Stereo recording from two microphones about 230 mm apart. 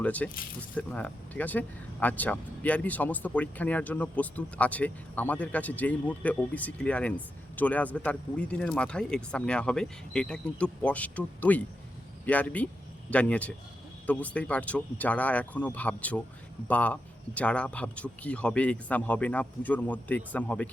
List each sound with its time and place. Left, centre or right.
0.0 s speech: centre
0.3 s speech: left
0.8 s speech: centre